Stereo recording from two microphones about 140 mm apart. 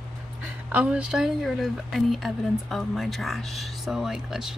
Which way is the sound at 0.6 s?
10° right (ahead or behind).